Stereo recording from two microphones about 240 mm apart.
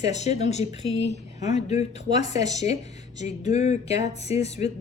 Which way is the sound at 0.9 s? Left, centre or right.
Right.